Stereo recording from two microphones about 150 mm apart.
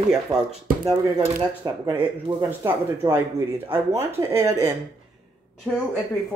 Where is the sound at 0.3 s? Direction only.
25° right (ahead or behind).